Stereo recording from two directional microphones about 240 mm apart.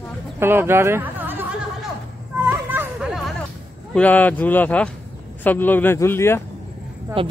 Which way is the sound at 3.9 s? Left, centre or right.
Centre.